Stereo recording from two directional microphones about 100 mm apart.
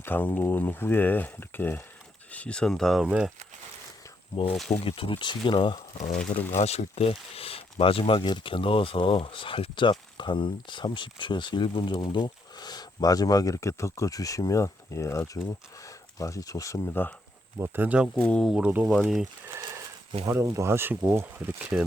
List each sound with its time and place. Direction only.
0.0 s speech: 20° left (ahead or behind); by 3.0 s 5° left (ahead or behind)
3.0 s speech: 5° right (ahead or behind)
4.5 s speech: 5° left (ahead or behind)
4.8 s speech: 65° left (ahead or behind)
6.1 s speech: 15° left (ahead or behind)
6.7 s speech: 90° left; by 16.9 s 30° left (ahead or behind)
16.9 s speech: 20° left (ahead or behind)
17.6 s speech: 15° right (ahead or behind)
18.1 s speech: 10° left (ahead or behind)
18.5 s speech: 10° right (ahead or behind)
19.5 s a sound: 30° right (ahead or behind)
20.2 s speech: 30° right (ahead or behind)